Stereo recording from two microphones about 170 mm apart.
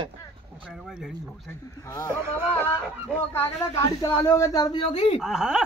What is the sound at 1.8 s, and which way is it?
Speech, 15° left (ahead or behind).